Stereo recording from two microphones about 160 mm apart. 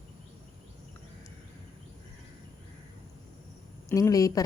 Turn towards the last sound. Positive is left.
turn(degrees=20)  # may be behind; listen again after turning